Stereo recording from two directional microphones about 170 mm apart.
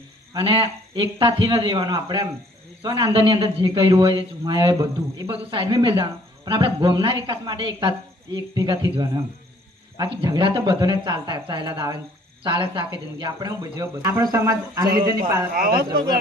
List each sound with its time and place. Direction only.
0.3 s speech: 30° right (ahead or behind)